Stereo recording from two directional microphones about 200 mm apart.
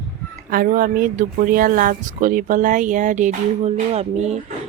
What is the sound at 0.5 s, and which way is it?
Speech, 45° right (ahead or behind).